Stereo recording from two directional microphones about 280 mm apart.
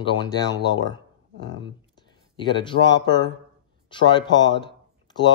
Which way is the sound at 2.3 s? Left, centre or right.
Centre.